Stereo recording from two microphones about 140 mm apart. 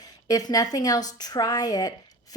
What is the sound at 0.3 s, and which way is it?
A woman's voice, 25° left (ahead or behind).